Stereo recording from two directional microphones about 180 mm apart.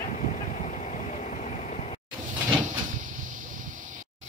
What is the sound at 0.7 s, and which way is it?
Vehicle, 40° left (ahead or behind).